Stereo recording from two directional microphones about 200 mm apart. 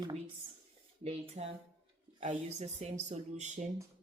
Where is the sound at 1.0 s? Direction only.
30° right (ahead or behind).